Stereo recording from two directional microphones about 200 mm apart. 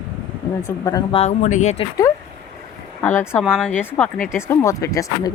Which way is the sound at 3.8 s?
10° left (ahead or behind).